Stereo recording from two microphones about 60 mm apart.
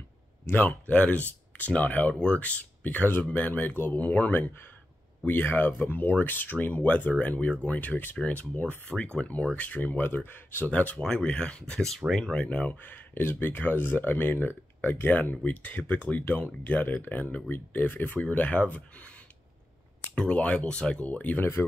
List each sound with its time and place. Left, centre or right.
0.5 s speech: left
5.2 s speech: left; by 12.4 s centre
12.4 s speech: left
21.4 s speech: left